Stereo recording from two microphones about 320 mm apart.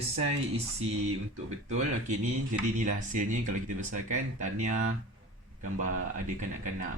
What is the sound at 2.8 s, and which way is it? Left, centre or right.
Speech, right.